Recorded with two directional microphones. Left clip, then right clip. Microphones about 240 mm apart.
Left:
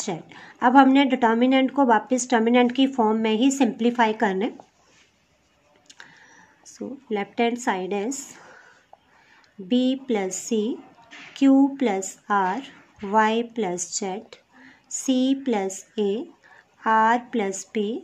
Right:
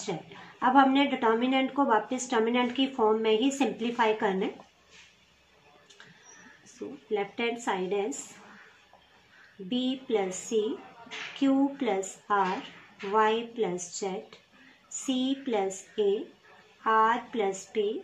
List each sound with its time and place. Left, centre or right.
0.0 s a woman's voice: left
7.1 s a woman's voice: left
9.7 s a woman's voice: left